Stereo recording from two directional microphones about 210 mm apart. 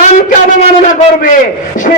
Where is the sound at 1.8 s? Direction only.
40° left (ahead or behind).